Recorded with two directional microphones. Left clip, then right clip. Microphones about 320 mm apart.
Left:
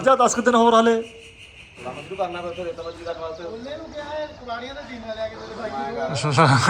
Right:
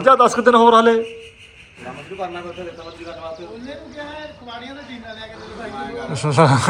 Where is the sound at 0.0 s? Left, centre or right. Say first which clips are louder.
Right 5 dB; centre.